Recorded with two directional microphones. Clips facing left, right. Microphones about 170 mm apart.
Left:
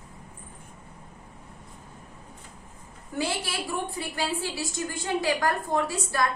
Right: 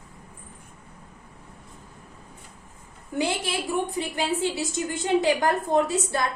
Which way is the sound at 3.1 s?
20° right (ahead or behind).